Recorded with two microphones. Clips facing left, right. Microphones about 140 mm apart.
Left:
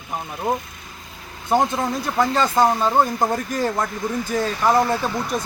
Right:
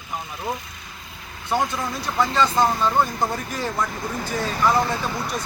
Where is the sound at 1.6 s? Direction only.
25° left (ahead or behind).